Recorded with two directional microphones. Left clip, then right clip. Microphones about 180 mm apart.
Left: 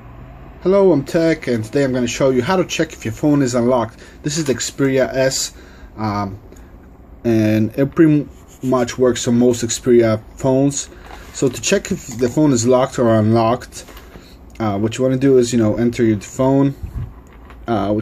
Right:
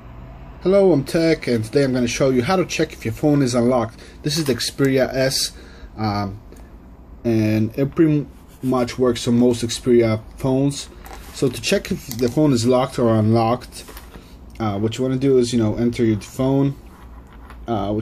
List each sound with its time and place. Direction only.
0.6 s speech: 5° left (ahead or behind)
7.2 s speech: 15° left (ahead or behind)
17.6 s speech: 25° left (ahead or behind)